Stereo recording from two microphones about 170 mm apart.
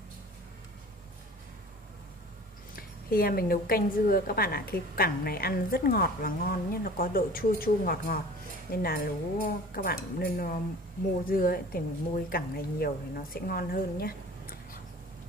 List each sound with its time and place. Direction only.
2.7 s a woman's voice: 60° left (ahead or behind)